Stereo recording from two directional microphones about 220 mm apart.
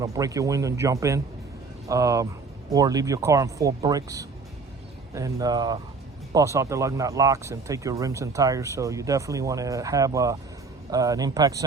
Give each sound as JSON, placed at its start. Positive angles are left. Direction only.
{"t": 0.0, "sound": "speech", "side_deg": -15}